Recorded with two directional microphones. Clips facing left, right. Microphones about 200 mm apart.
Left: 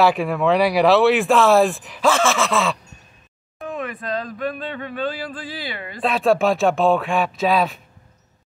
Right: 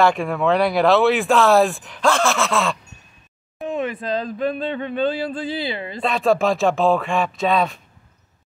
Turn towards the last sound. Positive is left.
turn(degrees=0)  # may be behind; listen again after turning